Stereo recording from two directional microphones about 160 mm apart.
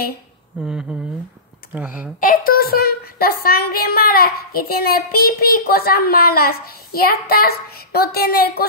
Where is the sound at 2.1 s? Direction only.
60° left (ahead or behind).